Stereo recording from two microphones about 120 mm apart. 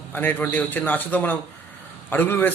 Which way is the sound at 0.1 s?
15° left (ahead or behind).